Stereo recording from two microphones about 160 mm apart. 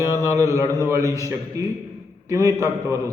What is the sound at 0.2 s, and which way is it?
A man's voice, 20° right (ahead or behind).